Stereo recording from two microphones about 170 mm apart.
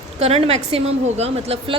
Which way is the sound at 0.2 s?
40° right (ahead or behind).